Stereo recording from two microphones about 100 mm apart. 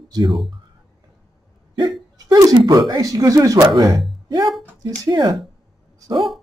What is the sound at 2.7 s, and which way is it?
Speech, 40° right (ahead or behind).